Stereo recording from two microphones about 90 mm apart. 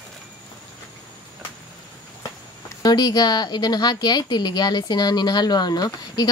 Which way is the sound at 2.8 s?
50° left (ahead or behind).